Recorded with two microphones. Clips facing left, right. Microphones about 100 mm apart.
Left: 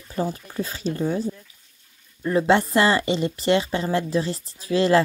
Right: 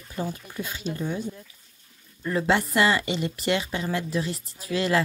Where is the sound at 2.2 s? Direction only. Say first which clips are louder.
Left 5 dB; 20° left (ahead or behind).